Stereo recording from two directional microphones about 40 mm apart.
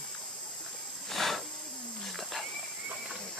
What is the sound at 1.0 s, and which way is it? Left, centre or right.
Hiss, centre.